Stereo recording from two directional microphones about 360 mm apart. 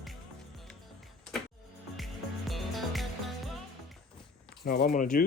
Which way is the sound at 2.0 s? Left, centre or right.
Centre.